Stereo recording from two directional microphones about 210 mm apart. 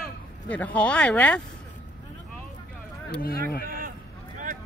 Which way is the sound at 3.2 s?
45° left (ahead or behind).